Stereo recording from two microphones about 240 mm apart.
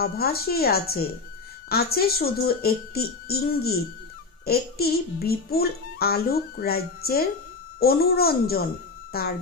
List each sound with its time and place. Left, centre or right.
0.0 s a child's voice: left